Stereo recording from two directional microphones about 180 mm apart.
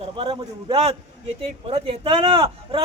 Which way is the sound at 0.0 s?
30° right (ahead or behind).